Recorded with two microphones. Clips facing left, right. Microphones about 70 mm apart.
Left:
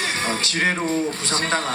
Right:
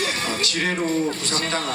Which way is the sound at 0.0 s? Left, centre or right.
Left.